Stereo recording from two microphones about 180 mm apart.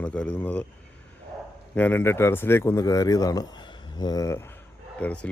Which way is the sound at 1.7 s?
10° left (ahead or behind).